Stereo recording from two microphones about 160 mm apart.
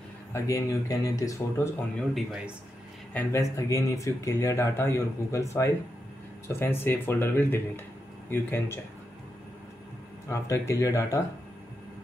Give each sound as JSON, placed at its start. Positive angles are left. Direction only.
{"t": 0.3, "sound": "a man's voice", "side_deg": 20}
{"t": 2.0, "sound": "speech", "side_deg": 0}
{"t": 3.1, "sound": "a man's voice", "side_deg": 15}
{"t": 10.2, "sound": "a man's voice", "side_deg": 20}